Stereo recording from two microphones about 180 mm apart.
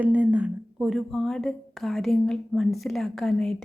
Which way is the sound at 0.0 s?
10° right (ahead or behind).